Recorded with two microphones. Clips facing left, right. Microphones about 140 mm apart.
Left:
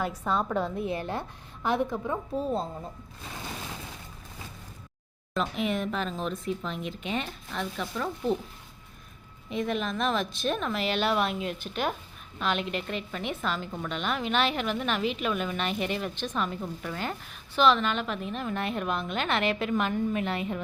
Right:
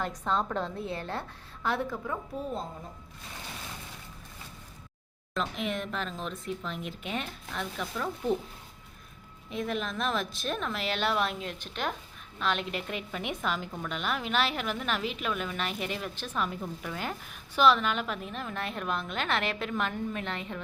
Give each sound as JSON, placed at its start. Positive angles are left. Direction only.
{"t": 0.0, "sound": "a woman's voice", "side_deg": 10}
{"t": 5.3, "sound": "speech", "side_deg": 5}
{"t": 9.5, "sound": "a woman's voice", "side_deg": 0}